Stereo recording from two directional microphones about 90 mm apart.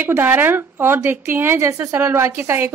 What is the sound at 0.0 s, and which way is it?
Speech, 25° right (ahead or behind).